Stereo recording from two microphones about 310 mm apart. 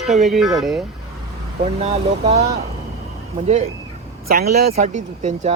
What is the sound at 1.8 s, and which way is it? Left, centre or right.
Speech, right.